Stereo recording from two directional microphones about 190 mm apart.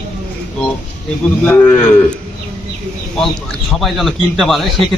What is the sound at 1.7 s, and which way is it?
Speech, 40° left (ahead or behind).